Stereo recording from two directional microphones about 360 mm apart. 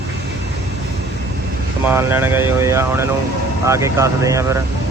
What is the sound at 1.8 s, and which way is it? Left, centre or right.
Speech, centre.